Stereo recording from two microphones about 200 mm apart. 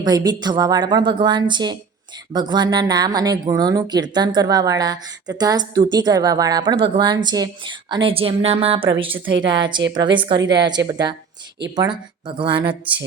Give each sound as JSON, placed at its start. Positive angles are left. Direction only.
{"t": 0.0, "sound": "speech", "side_deg": -20}